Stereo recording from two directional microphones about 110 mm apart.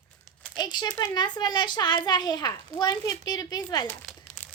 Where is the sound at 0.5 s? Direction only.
40° left (ahead or behind).